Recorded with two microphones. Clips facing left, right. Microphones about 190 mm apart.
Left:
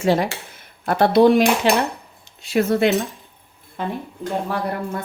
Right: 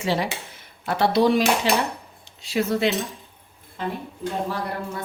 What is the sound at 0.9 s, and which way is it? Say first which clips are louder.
Cutlery: left 5 dB; 55° left (ahead or behind).